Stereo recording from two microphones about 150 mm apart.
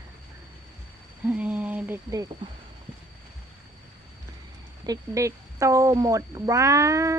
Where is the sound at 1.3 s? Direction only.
10° right (ahead or behind).